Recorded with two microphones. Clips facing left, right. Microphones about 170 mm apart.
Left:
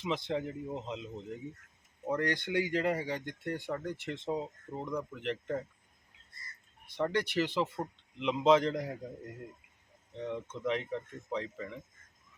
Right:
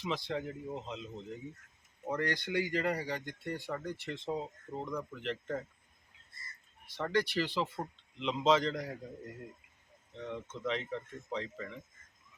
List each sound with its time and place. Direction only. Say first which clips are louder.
0.0 s speech: left 2 dB; 20° left (ahead or behind)
6.9 s speech: left 1 dB; 15° left (ahead or behind)
10.1 s speech: left 3 dB; 15° left (ahead or behind)